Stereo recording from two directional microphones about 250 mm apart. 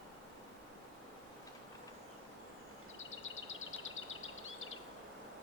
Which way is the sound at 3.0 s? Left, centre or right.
Left.